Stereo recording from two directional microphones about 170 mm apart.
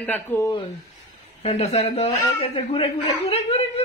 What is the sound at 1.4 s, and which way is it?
Speech, 40° left (ahead or behind).